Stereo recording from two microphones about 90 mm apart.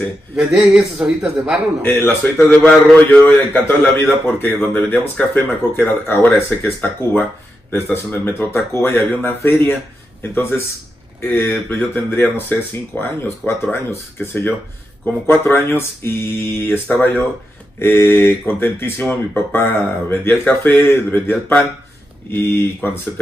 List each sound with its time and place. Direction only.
0.4 s speech: 10° right (ahead or behind)
1.9 s speech: 25° left (ahead or behind)
11.1 s speech: 25° left (ahead or behind)
17.7 s speech: 30° left (ahead or behind)